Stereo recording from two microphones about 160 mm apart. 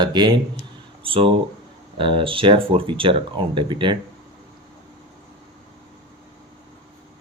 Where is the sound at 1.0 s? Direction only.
35° right (ahead or behind).